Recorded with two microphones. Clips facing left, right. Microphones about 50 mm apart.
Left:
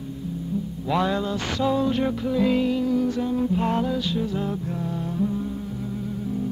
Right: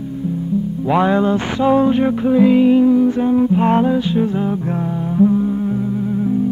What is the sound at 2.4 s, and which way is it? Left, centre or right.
Music, right.